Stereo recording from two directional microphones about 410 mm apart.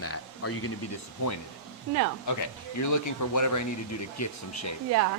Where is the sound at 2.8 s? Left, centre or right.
Left.